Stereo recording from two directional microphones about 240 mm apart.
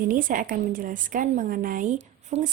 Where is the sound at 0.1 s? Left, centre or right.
Right.